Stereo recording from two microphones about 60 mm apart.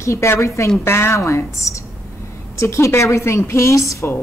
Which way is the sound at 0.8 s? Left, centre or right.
Left.